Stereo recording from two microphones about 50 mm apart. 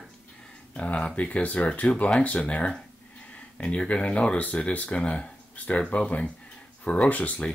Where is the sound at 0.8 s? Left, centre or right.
Left.